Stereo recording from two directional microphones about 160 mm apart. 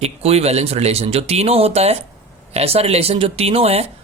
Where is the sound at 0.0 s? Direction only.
40° right (ahead or behind).